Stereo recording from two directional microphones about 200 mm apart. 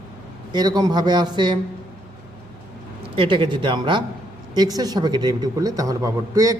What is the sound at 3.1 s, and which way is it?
A man's voice, 25° right (ahead or behind).